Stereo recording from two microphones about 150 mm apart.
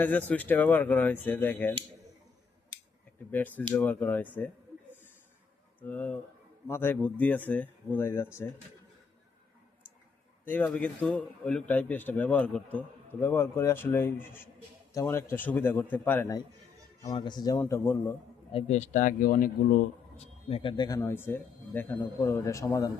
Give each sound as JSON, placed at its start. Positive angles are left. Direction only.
{"t": 0.0, "sound": "speech", "side_deg": 10}
{"t": 3.8, "sound": "speech", "side_deg": 10}
{"t": 5.8, "sound": "speech", "side_deg": 10}
{"t": 10.5, "sound": "speech", "side_deg": 10}
{"t": 17.6, "sound": "speech", "side_deg": 15}
{"t": 18.5, "sound": "speech", "side_deg": 50}
{"t": 20.1, "sound": "speech", "side_deg": 45}